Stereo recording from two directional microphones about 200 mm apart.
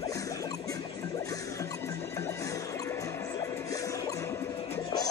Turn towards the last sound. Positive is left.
turn(degrees=20)  # may be behind; listen again after turning